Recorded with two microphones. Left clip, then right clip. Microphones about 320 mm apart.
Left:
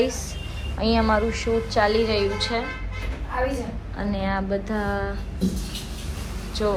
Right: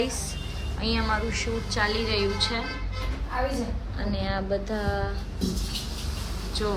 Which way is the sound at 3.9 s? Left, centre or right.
Centre.